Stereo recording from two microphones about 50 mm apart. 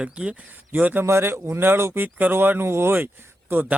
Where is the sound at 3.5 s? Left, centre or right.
Right.